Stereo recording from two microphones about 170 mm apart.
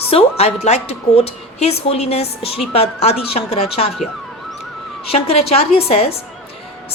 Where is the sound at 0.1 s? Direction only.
35° left (ahead or behind).